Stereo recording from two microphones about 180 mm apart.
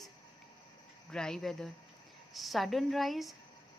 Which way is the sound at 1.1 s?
5° left (ahead or behind).